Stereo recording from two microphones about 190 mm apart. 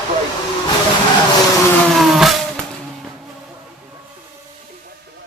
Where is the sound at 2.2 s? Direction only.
Centre (ahead or behind).